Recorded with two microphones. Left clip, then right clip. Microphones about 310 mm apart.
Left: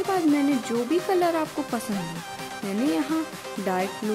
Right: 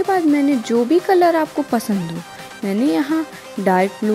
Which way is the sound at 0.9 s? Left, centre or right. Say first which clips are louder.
Right 9 dB; centre.